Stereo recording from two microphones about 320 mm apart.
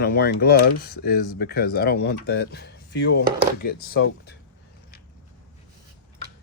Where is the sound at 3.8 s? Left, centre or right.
Left.